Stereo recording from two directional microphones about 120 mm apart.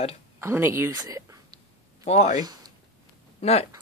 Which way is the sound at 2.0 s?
65° left (ahead or behind).